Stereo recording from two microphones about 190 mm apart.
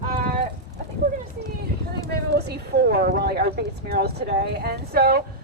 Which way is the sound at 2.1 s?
60° right (ahead or behind).